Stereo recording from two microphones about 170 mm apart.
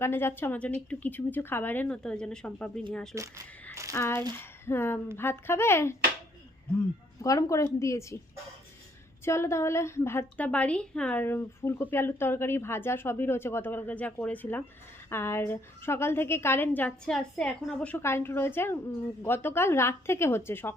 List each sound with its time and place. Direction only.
0.0 s a woman's voice: 15° left (ahead or behind)
3.2 s speech: 20° right (ahead or behind)
3.9 s a woman's voice: 15° left (ahead or behind)
7.2 s a woman's voice: 20° left (ahead or behind)
9.2 s a woman's voice: 15° left (ahead or behind)